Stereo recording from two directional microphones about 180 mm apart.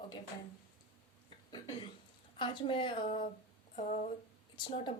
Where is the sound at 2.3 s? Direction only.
25° left (ahead or behind).